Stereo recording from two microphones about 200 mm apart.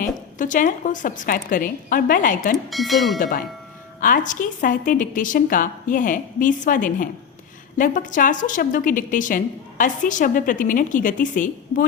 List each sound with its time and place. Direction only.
0.0 s a woman's voice: 40° left (ahead or behind)
2.6 s speech: centre (ahead or behind)
3.2 s a woman's voice: 45° left (ahead or behind)